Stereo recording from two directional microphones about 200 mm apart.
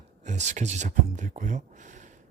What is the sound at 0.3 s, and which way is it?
Speech, 35° right (ahead or behind).